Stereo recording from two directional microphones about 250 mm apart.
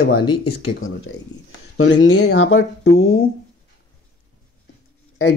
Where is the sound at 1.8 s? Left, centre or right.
Left.